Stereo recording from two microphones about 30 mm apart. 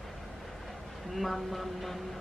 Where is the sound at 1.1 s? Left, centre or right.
Centre.